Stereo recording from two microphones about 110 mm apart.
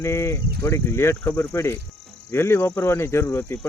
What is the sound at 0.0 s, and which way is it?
Speech, 25° left (ahead or behind).